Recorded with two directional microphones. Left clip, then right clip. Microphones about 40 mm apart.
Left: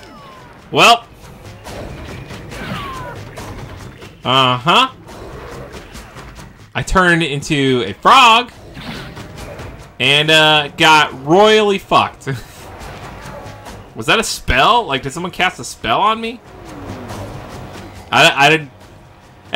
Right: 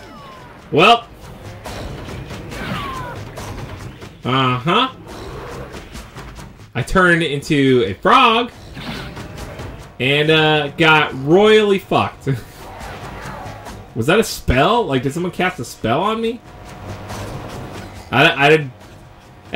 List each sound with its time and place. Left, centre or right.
0.7 s speech: centre
1.6 s music: right
4.3 s speech: centre
5.1 s music: right
6.8 s speech: centre
8.7 s music: right
9.9 s speech: centre
11.3 s speech: centre
12.7 s music: right
13.9 s speech: centre
16.8 s music: right
18.1 s speech: centre